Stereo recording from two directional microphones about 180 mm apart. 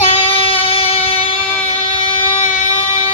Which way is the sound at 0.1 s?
30° left (ahead or behind).